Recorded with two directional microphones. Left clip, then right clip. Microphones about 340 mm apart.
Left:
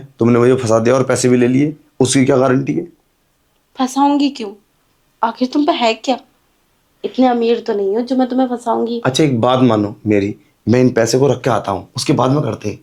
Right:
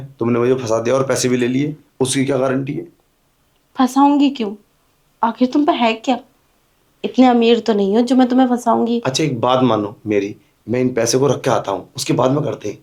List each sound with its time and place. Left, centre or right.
0.2 s speech: left
3.7 s speech: centre
9.0 s speech: left
10.7 s speech: left
11.1 s speech: centre